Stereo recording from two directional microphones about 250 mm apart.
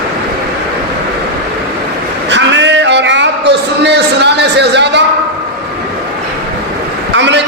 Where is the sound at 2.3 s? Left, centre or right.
Right.